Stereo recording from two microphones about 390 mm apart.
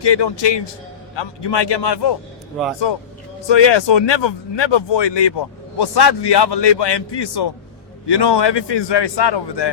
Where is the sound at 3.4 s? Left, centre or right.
Left.